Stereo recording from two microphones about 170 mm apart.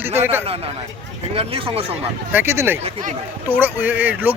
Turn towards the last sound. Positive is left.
turn(degrees=-10)  # may be behind; listen again after turning